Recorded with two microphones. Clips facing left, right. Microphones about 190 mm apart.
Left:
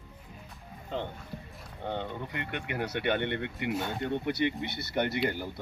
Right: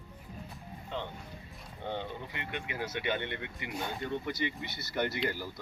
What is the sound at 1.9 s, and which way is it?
Speech, 60° left (ahead or behind).